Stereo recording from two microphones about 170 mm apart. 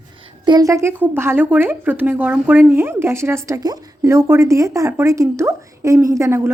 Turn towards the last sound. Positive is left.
turn(degrees=-15)  # may be behind; listen again after turning